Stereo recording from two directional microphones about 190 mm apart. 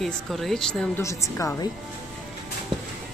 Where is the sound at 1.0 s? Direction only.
15° left (ahead or behind).